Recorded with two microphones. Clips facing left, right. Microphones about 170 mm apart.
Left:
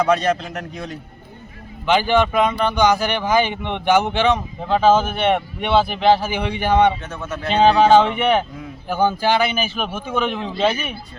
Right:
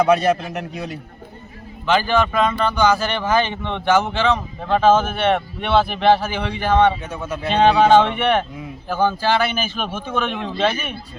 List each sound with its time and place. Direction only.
0.0 s a man's voice: 10° right (ahead or behind)
1.9 s a man's voice: 15° left (ahead or behind)
7.0 s a man's voice: 10° right (ahead or behind)
7.9 s a man's voice: 5° left (ahead or behind)